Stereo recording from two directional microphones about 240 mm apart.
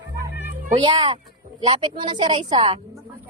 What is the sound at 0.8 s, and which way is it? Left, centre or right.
Speech, right.